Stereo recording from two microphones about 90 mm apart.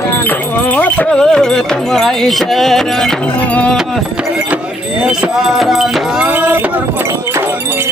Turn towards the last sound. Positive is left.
turn(degrees=-20)  # may be behind; listen again after turning